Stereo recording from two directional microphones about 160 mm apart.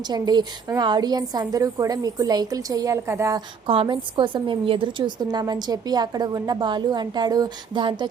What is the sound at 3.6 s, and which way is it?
A woman's voice, 35° right (ahead or behind).